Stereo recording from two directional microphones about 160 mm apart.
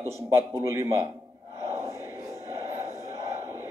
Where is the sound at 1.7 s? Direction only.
20° right (ahead or behind).